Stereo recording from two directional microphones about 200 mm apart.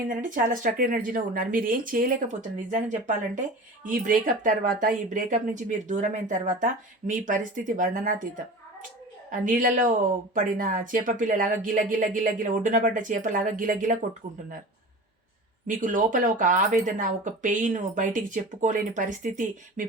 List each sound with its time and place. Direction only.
0.1 s speech: 40° right (ahead or behind)
9.3 s speech: 40° right (ahead or behind)
15.6 s speech: 40° right (ahead or behind)